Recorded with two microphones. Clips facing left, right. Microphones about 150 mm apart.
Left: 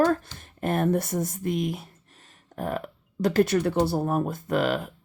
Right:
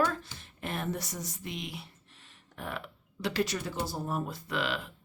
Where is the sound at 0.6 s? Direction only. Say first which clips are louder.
Left 11 dB; 50° left (ahead or behind).